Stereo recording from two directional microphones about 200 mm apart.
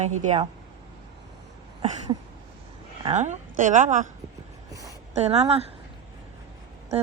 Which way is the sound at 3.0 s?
35° right (ahead or behind).